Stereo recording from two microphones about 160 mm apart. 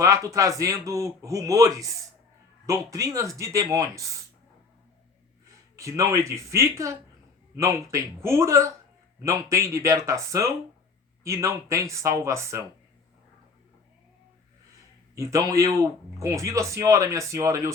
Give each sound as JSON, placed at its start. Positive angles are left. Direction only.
{"t": 0.0, "sound": "a man's voice", "side_deg": -20}
{"t": 5.7, "sound": "a man's voice", "side_deg": -20}
{"t": 15.1, "sound": "a man's voice", "side_deg": -20}